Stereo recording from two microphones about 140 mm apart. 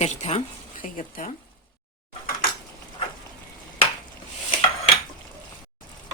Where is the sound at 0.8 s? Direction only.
75° left (ahead or behind).